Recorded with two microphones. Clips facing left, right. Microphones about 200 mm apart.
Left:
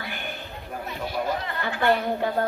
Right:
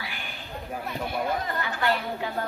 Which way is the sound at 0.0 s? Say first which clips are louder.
Left 4 dB; 55° left (ahead or behind).